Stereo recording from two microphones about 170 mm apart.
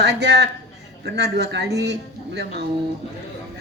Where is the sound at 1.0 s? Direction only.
80° right.